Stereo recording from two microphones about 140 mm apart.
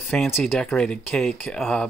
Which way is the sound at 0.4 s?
5° left (ahead or behind).